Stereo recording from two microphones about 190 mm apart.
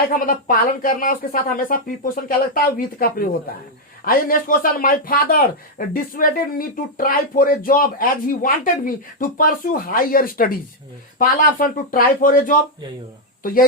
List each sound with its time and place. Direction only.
0.1 s a man's voice: 45° left (ahead or behind)